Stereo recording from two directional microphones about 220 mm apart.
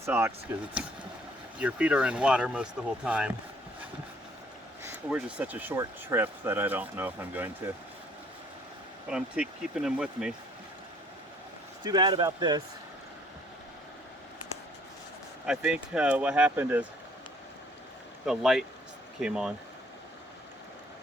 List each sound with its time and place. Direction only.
0.0 s speech: 10° right (ahead or behind)
4.8 s speech: 10° right (ahead or behind)
9.0 s speech: 5° right (ahead or behind)
11.9 s speech: 20° right (ahead or behind)
15.4 s speech: 5° right (ahead or behind)
18.3 s speech: centre (ahead or behind)